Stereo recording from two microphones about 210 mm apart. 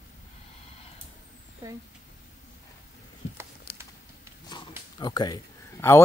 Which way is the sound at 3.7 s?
50° left (ahead or behind).